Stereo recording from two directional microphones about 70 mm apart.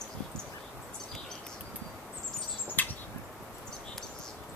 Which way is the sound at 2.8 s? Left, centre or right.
Left.